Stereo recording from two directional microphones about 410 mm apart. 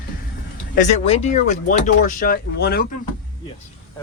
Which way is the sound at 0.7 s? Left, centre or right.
Centre.